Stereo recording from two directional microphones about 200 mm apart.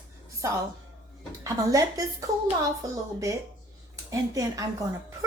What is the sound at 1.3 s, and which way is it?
Speech, 15° right (ahead or behind).